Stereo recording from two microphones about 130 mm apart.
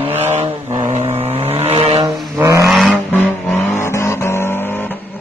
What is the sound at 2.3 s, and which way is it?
Vehicle, 25° right (ahead or behind).